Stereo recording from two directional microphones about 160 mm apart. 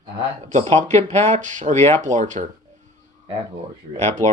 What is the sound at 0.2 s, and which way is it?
Speech, 40° right (ahead or behind).